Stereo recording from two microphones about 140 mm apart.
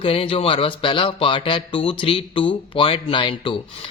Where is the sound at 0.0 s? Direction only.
40° left (ahead or behind).